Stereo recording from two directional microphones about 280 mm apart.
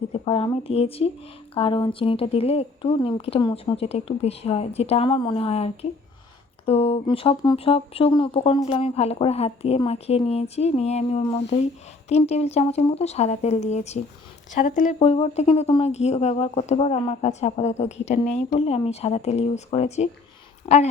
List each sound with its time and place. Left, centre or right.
0.1 s a woman's voice: centre